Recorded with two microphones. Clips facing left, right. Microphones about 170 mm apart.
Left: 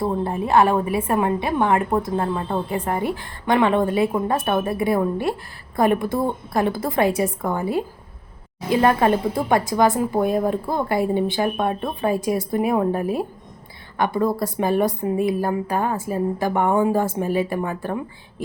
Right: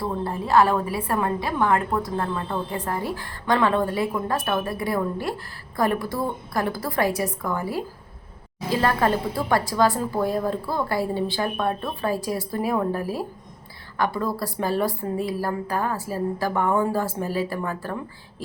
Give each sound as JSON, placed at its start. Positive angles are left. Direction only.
{"t": 0.0, "sound": "a woman's voice", "side_deg": 20}